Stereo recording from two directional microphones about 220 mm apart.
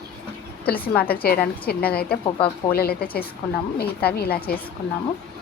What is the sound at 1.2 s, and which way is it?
A woman's voice, 45° left (ahead or behind).